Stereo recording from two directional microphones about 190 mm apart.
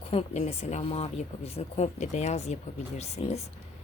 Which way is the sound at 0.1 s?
35° left (ahead or behind).